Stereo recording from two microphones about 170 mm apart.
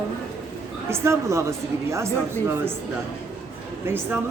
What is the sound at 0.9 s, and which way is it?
Speech, 15° right (ahead or behind).